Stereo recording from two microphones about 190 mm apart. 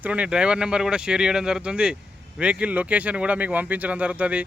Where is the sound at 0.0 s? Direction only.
5° right (ahead or behind).